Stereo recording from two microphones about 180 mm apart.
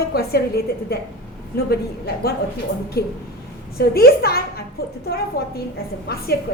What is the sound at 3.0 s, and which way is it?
A woman's voice, 60° left (ahead or behind).